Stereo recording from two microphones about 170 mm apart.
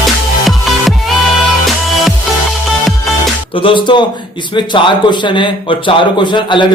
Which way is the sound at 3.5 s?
30° left (ahead or behind).